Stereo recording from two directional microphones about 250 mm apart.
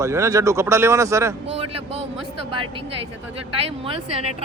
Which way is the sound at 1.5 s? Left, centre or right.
Right.